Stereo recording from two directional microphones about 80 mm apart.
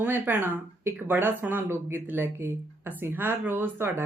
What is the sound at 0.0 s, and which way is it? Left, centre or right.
Speech, right.